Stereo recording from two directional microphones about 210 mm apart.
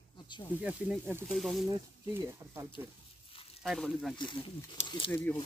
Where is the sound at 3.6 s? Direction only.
Centre (ahead or behind).